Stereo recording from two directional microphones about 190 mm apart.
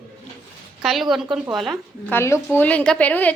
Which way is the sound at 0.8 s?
Centre (ahead or behind).